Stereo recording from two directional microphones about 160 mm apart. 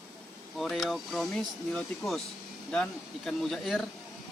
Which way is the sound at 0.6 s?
Centre (ahead or behind).